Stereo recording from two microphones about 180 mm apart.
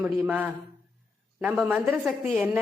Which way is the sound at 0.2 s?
10° right (ahead or behind).